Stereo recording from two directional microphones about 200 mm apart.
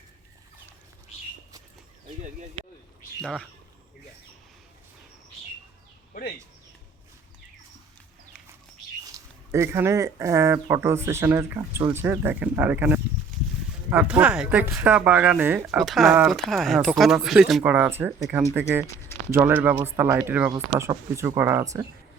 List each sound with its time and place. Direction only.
3.2 s speech: centre (ahead or behind)
9.1 s speech: 15° right (ahead or behind)
13.3 s livestock: 35° right (ahead or behind)
13.9 s speech: 5° right (ahead or behind)